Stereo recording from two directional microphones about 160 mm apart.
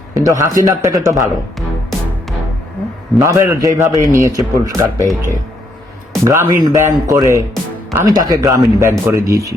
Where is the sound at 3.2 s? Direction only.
20° right (ahead or behind).